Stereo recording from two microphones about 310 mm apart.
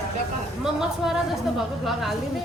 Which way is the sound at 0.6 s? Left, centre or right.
Centre.